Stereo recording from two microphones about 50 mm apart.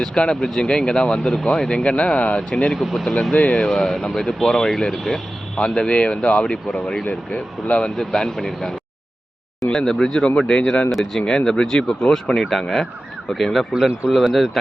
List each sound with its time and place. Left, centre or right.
0.0 s speech: centre
2.7 s speech: centre
4.0 s speech: left
4.4 s speech: centre
5.5 s speech: centre